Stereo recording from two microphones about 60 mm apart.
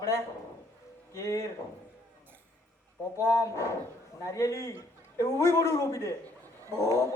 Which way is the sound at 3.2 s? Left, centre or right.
Left.